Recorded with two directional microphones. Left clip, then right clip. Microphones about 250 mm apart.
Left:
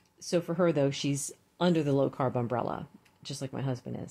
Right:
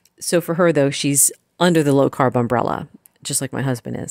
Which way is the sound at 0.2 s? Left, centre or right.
Right.